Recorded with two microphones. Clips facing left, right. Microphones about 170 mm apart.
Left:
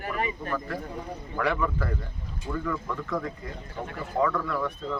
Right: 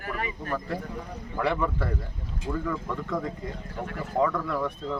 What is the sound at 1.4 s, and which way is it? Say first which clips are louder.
Speech: right 1 dB; 20° right (ahead or behind).